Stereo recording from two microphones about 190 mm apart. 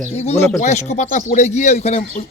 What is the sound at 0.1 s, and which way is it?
Speech, 35° left (ahead or behind).